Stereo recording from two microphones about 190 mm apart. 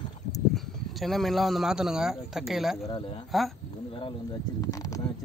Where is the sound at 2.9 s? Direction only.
20° left (ahead or behind).